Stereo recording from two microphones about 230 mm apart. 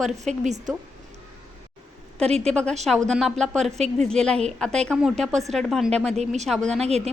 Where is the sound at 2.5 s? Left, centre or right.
Centre.